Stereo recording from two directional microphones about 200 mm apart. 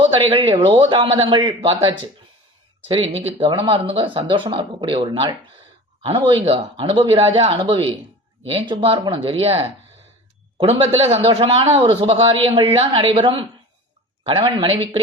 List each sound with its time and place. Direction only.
0.0 s speech: 30° right (ahead or behind)